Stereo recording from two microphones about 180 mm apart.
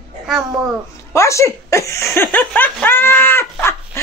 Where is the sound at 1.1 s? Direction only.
15° left (ahead or behind).